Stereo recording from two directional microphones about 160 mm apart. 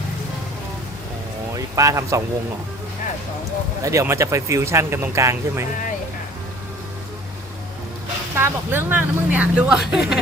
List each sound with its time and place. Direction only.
1.5 s speech: 20° right (ahead or behind)
3.8 s speech: 20° right (ahead or behind)
8.4 s speech: 15° right (ahead or behind)